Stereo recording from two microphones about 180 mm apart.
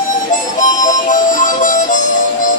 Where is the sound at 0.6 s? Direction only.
45° left (ahead or behind).